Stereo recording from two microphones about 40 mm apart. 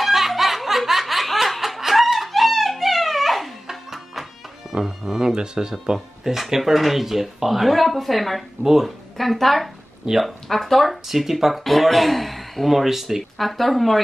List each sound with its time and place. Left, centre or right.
0.0 s snicker: centre
3.6 s music: centre
4.8 s speech: centre
5.3 s speech: centre
5.9 s speech: centre
9.1 s speech: centre